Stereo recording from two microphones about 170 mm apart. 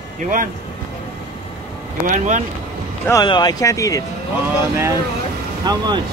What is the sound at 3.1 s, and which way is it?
Speech, 25° left (ahead or behind).